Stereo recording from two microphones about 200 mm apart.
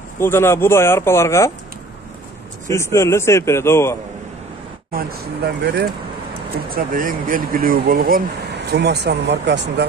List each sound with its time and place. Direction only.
0.2 s speech: 10° left (ahead or behind)
2.7 s speech: 15° left (ahead or behind)
4.9 s speech: 55° right (ahead or behind)
6.7 s speech: 45° right (ahead or behind)